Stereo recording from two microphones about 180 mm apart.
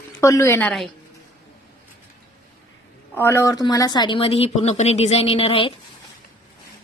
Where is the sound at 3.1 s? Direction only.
15° left (ahead or behind); by 5.7 s 30° left (ahead or behind).